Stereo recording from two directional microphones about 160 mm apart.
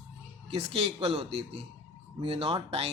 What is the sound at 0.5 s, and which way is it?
Speech, 40° right (ahead or behind).